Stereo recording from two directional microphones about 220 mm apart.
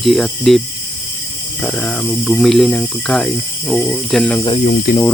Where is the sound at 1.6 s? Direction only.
5° left (ahead or behind).